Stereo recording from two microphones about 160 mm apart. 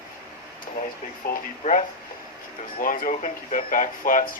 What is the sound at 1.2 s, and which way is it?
Speech, 70° left (ahead or behind).